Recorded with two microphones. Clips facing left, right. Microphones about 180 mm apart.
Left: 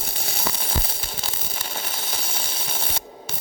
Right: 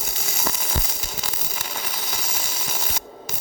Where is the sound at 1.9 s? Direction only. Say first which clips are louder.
Even; 30° left (ahead or behind).